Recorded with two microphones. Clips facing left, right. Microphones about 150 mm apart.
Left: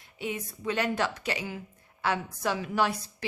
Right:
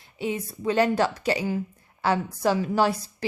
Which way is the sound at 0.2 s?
30° right (ahead or behind).